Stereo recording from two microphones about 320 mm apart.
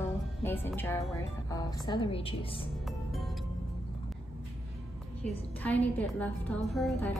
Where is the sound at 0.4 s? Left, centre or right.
Centre.